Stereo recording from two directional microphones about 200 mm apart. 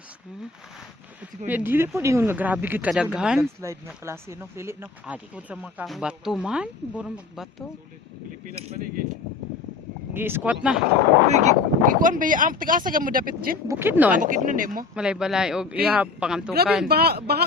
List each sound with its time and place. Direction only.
1.5 s speech: 10° right (ahead or behind)
3.6 s speech: 15° right (ahead or behind)
10.2 s speech: 10° right (ahead or behind)
11.3 s speech: 35° right (ahead or behind)
13.7 s speech: 10° right (ahead or behind)
14.2 s speech: 40° right (ahead or behind)
14.9 s speech: 5° right (ahead or behind)
16.9 s speech: 50° right (ahead or behind)